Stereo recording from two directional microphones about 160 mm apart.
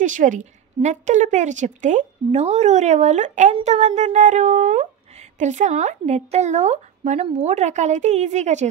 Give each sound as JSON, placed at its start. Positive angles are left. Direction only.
{"t": 0.0, "sound": "speech", "side_deg": -55}